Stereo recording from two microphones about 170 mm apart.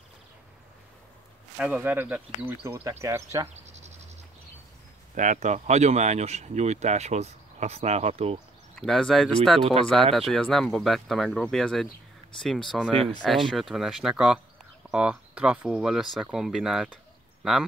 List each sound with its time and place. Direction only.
1.6 s speech: 10° right (ahead or behind)
3.4 s insect: 40° right (ahead or behind)
5.1 s speech: 45° right (ahead or behind)
8.7 s speech: 5° left (ahead or behind)